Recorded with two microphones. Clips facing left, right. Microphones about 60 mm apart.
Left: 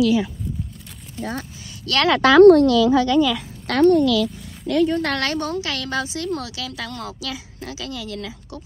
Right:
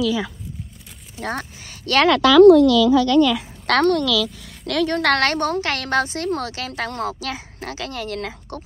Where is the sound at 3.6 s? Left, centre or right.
Right.